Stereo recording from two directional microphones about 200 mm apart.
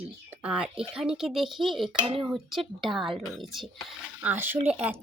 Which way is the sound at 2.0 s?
25° right (ahead or behind).